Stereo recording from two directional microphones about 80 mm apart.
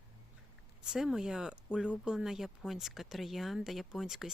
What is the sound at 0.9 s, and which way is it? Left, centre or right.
Speech, centre.